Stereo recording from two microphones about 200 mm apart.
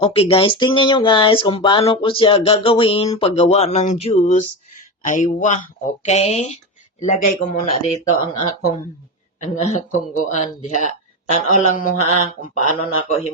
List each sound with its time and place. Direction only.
0.0 s a man's voice: 30° left (ahead or behind)
9.4 s a man's voice: 35° left (ahead or behind)